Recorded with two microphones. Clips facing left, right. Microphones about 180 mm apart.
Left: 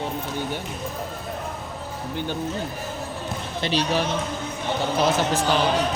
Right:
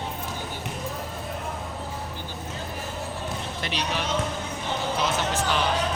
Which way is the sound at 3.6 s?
30° left (ahead or behind).